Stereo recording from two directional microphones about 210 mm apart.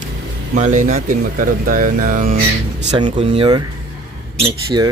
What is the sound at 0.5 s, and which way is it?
Speech, 35° right (ahead or behind).